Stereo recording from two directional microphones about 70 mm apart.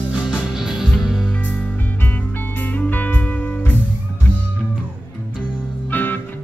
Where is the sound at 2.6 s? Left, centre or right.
Left.